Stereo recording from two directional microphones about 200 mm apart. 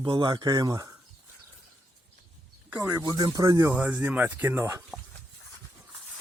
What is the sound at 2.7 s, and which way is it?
Speech, 10° right (ahead or behind).